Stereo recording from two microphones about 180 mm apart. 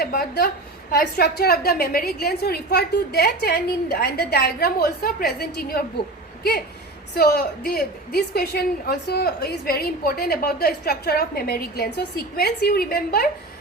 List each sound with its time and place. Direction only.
0.0 s a woman's voice: 60° left (ahead or behind)
7.1 s a woman's voice: 60° left (ahead or behind)